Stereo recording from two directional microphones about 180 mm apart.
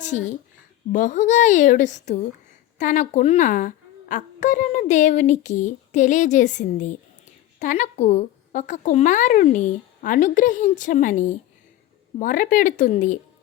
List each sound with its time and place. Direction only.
0.0 s a woman's voice: 40° left (ahead or behind)